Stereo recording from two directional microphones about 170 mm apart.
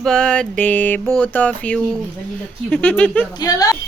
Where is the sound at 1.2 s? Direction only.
10° left (ahead or behind).